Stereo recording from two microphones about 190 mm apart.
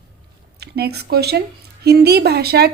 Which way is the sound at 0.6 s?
60° right (ahead or behind).